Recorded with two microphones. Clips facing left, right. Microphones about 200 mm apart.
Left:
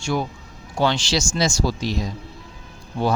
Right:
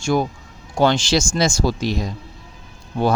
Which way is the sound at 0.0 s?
45° right (ahead or behind).